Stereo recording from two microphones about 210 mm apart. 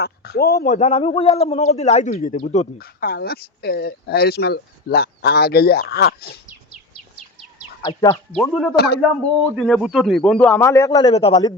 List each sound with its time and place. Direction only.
0.0 s speech: 50° left (ahead or behind)
0.6 s speech: 35° left (ahead or behind)
2.7 s speech: 45° left (ahead or behind)
7.8 s speech: 20° left (ahead or behind)
8.4 s a man's voice: 5° left (ahead or behind)
8.7 s speech: 50° left (ahead or behind)
9.6 s a man's voice: centre (ahead or behind)
11.1 s a man's voice: 30° left (ahead or behind)